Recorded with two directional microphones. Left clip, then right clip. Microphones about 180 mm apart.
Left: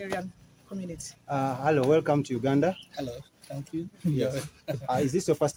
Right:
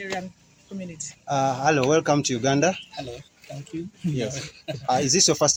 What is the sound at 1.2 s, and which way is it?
Speech, 40° right (ahead or behind).